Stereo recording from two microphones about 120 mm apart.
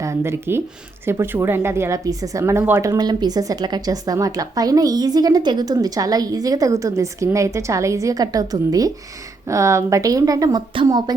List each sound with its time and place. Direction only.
0.0 s speech: 25° right (ahead or behind)
3.0 s a woman's voice: 35° right (ahead or behind)